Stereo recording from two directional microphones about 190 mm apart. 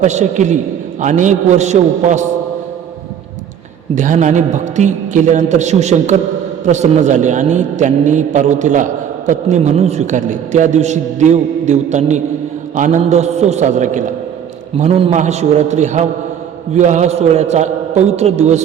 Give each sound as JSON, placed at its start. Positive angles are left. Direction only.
{"t": 0.0, "sound": "a man's voice", "side_deg": -40}
{"t": 3.9, "sound": "a man's voice", "side_deg": -40}